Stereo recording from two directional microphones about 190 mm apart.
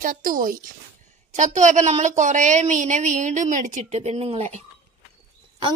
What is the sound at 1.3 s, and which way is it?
A woman's voice, 40° right (ahead or behind).